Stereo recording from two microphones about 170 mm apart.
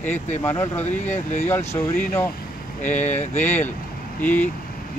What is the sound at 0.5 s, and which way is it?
Speech, 10° left (ahead or behind).